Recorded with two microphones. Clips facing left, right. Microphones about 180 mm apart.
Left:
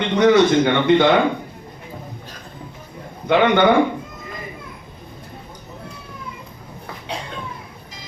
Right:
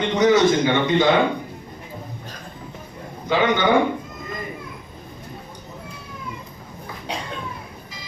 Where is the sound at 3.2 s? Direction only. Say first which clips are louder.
Left 4 dB; 60° left (ahead or behind).